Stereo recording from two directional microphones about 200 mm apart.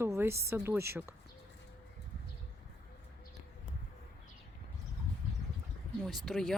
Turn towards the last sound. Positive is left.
turn(degrees=0)  # may be behind; listen again after turning